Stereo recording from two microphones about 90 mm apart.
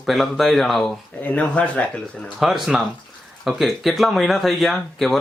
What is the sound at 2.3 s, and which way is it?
Speech, 5° right (ahead or behind).